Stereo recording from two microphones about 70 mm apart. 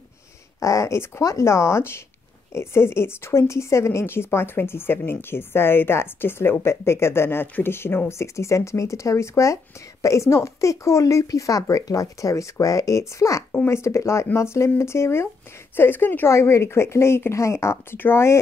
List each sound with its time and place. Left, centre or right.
0.6 s a woman's voice: left
16.3 s a woman's voice: left